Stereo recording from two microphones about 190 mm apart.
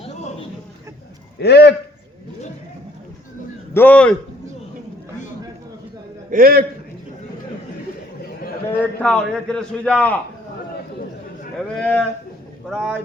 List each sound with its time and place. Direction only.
0.0 s a sound: 30° left (ahead or behind)
1.4 s a man's voice: 60° left (ahead or behind)
3.8 s a man's voice: 5° left (ahead or behind)
6.3 s a man's voice: 50° right (ahead or behind)
8.8 s a man's voice: 5° left (ahead or behind)
11.5 s a man's voice: 5° left (ahead or behind)